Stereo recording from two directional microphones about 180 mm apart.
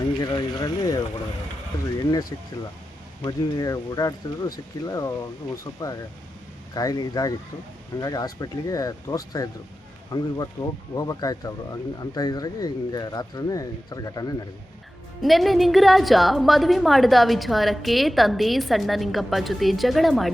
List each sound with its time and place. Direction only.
0.2 s speech: 20° left (ahead or behind)
3.2 s speech: 20° left (ahead or behind)
15.2 s a woman's voice: centre (ahead or behind)